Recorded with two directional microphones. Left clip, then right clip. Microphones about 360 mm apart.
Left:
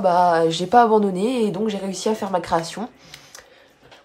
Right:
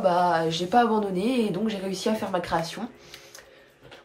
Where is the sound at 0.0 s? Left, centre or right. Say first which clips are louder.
Left 6 dB; centre.